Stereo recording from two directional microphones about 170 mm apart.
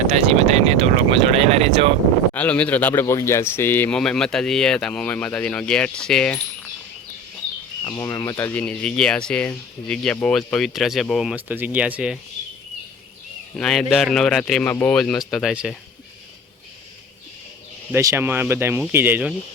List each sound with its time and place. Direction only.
0.3 s speech: 40° right (ahead or behind)
2.3 s speech: 10° left (ahead or behind)
7.9 s speech: 20° left (ahead or behind); by 12.2 s 5° right (ahead or behind)
13.6 s speech: centre (ahead or behind)
17.9 s speech: 15° right (ahead or behind)